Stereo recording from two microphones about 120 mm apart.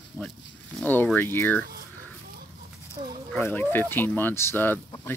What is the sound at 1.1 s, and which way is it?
Speech, 15° left (ahead or behind).